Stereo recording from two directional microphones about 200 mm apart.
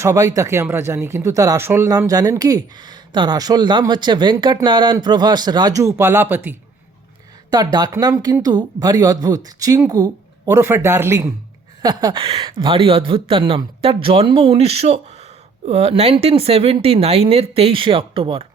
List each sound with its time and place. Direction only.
0.0 s speech: 15° right (ahead or behind)
7.5 s a woman's voice: 20° right (ahead or behind)